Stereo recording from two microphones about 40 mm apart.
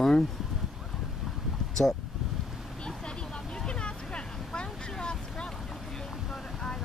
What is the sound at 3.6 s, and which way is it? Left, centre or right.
Vehicle, left.